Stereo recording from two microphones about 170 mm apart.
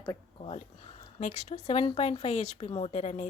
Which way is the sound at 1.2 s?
45° left (ahead or behind).